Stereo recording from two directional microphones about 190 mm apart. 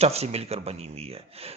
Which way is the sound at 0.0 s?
35° right (ahead or behind).